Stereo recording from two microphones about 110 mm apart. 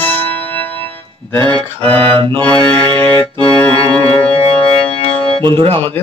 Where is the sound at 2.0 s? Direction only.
50° right (ahead or behind).